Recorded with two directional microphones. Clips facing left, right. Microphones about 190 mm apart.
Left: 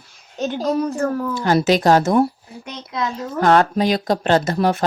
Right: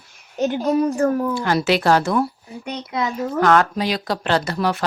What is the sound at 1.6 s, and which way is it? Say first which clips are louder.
Speech: left 2 dB; 40° left (ahead or behind).